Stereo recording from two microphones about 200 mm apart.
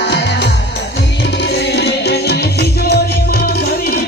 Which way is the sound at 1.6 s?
55° left (ahead or behind).